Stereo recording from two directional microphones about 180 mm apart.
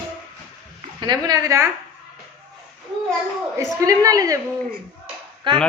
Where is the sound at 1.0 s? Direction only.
25° right (ahead or behind).